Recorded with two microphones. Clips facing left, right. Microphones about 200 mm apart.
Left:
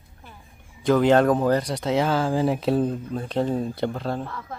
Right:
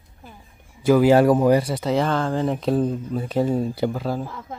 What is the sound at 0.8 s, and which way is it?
Speech, 10° right (ahead or behind).